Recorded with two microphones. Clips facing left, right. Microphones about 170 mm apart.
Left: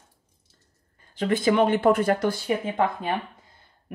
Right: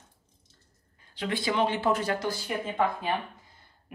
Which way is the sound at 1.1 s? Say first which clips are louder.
Left 7 dB; 45° left (ahead or behind).